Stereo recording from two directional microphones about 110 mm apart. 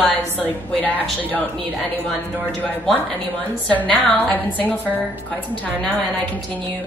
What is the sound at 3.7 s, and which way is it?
A woman's voice, 15° left (ahead or behind).